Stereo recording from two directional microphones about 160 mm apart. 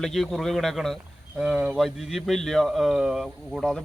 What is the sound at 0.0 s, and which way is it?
Speech, centre (ahead or behind).